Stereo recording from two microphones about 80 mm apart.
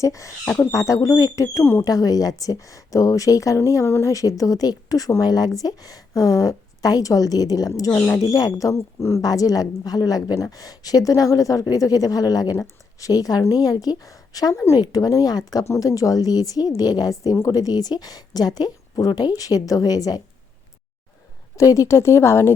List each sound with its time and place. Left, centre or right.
0.0 s a woman's voice: left
4.1 s a woman's voice: left
15.6 s a woman's voice: left
21.5 s a woman's voice: left